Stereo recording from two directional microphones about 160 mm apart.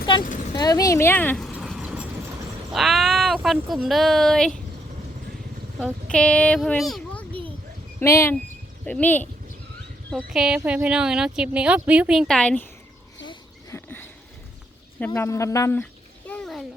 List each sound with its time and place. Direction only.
0.5 s speech: 25° left (ahead or behind)
1.5 s vehicle: centre (ahead or behind)
2.7 s speech: centre (ahead or behind)
6.1 s speech: 5° left (ahead or behind)
7.9 s speech: 15° left (ahead or behind)
10.3 s speech: 5° right (ahead or behind)
13.2 s a sound: 15° left (ahead or behind)
14.9 s speech: 10° left (ahead or behind)
16.2 s a sound: 5° left (ahead or behind)